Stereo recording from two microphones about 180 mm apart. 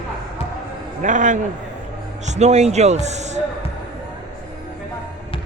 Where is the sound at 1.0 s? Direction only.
45° right (ahead or behind).